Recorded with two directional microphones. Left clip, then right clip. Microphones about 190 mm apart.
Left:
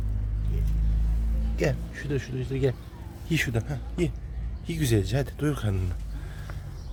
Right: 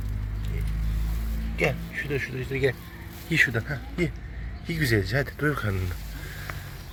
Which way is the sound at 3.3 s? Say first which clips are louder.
Right 7 dB; 25° left (ahead or behind).